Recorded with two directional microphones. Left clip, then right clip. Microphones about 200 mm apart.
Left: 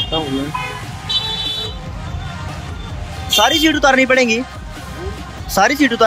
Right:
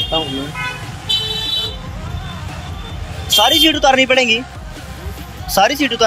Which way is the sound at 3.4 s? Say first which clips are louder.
Right 1 dB; 15° left (ahead or behind).